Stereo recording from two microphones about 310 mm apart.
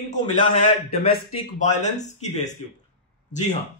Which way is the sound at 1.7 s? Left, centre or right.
Left.